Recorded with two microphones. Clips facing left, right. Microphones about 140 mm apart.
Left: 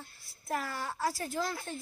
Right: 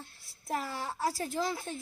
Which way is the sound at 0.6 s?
25° right (ahead or behind).